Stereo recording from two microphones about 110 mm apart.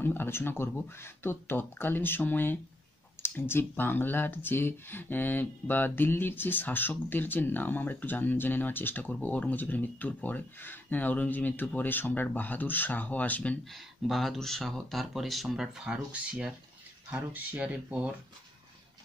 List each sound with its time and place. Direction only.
0.0 s speech: 20° left (ahead or behind)
13.7 s speech: centre (ahead or behind)